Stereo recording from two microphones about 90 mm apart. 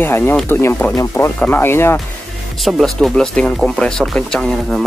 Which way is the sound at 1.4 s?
20° left (ahead or behind).